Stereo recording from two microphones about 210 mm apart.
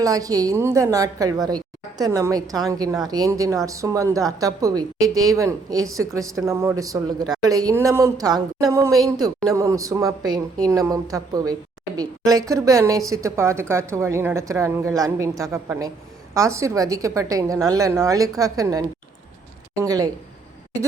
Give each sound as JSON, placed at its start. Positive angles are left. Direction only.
{"t": 0.0, "sound": "a woman's voice", "side_deg": -15}